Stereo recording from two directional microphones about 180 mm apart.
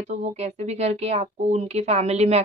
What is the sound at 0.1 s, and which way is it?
Speech, 40° right (ahead or behind).